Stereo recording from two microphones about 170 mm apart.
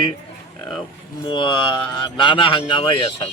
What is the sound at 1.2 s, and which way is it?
A man's voice, 25° left (ahead or behind).